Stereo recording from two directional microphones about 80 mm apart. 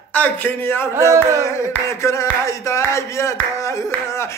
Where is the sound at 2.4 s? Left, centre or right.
Left.